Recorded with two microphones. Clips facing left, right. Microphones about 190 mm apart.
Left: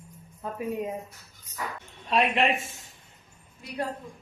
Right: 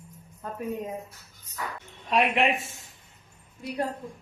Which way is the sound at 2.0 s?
10° right (ahead or behind).